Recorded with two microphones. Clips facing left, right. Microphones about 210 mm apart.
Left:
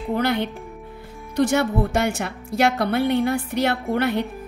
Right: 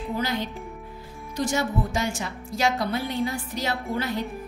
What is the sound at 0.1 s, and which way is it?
A woman's voice, 60° left (ahead or behind).